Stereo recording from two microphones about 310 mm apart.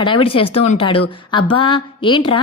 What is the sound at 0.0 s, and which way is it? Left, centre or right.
A woman's voice, centre.